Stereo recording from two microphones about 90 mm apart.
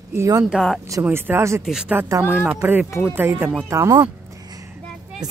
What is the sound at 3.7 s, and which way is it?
Speech, 35° right (ahead or behind).